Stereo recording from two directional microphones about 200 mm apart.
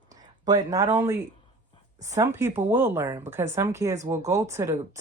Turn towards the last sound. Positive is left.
turn(degrees=-15)  # may be behind; listen again after turning